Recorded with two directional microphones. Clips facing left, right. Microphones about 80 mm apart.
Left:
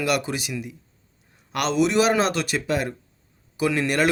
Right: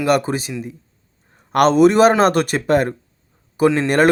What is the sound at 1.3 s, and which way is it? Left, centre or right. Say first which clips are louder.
A man's voice: right 10 dB; right.